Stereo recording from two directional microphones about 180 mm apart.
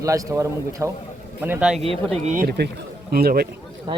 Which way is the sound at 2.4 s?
60° right (ahead or behind).